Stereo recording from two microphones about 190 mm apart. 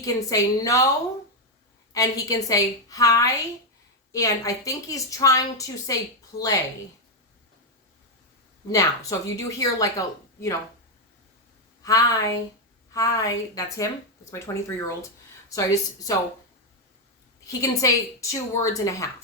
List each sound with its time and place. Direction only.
0.0 s a woman's voice: 20° left (ahead or behind)
1.9 s a woman's voice: 20° left (ahead or behind)
6.3 s speech: 35° left (ahead or behind)
8.7 s a woman's voice: 15° left (ahead or behind)
11.8 s a woman's voice: 20° left (ahead or behind)
17.4 s a woman's voice: 15° left (ahead or behind)